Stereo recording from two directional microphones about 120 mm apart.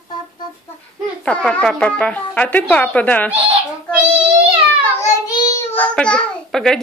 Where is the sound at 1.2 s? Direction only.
10° left (ahead or behind).